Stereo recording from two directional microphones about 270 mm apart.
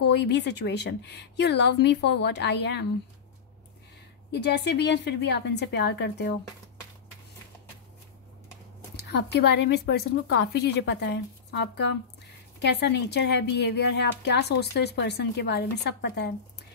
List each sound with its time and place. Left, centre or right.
0.1 s a woman's voice: left
4.3 s a woman's voice: left
8.9 s a woman's voice: left